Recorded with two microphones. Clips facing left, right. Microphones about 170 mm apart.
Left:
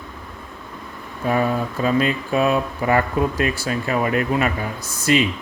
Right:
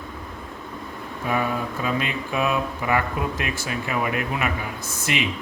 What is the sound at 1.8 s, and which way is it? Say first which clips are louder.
Speech: left 10 dB; 35° left (ahead or behind).